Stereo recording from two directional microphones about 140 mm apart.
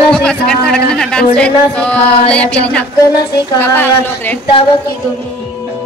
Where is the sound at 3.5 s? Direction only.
15° left (ahead or behind).